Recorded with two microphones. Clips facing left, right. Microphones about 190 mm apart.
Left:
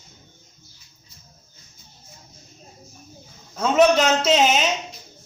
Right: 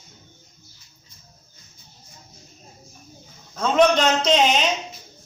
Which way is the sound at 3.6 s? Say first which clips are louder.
Left 1 dB; 10° left (ahead or behind).